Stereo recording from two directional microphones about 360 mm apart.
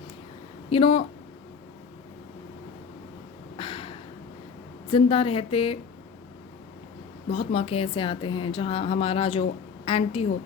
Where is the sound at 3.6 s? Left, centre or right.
Centre.